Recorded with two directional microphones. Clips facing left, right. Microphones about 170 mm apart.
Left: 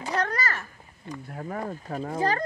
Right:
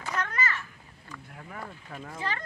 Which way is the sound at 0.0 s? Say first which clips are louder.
Left 4 dB; 35° left (ahead or behind).